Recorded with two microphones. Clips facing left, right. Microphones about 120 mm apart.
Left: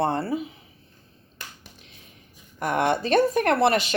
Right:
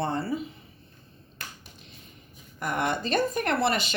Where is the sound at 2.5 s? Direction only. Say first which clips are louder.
Left 5 dB; 70° left (ahead or behind).